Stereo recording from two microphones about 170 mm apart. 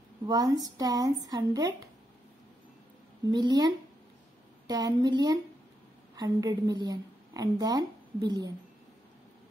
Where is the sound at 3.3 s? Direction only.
25° right (ahead or behind).